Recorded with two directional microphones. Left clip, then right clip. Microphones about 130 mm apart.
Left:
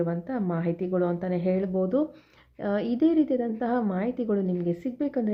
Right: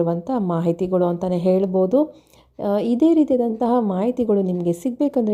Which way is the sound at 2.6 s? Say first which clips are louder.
Right 7 dB; 40° right (ahead or behind).